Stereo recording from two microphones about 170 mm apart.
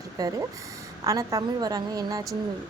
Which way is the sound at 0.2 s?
20° right (ahead or behind).